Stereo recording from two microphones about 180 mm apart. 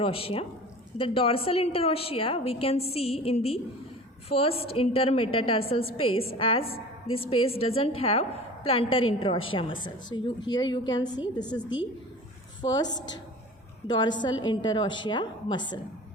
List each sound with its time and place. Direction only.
0.0 s a woman's voice: 30° left (ahead or behind)
12.7 s a woman's voice: 20° left (ahead or behind)